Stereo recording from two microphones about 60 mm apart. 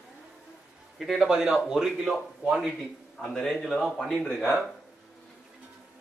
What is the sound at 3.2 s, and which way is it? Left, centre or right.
A man's voice, centre.